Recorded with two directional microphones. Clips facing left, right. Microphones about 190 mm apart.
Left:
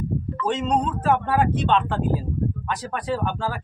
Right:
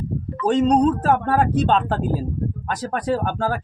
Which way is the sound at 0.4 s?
40° right (ahead or behind).